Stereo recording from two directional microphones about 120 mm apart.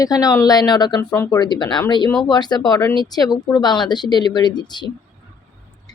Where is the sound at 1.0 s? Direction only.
25° left (ahead or behind).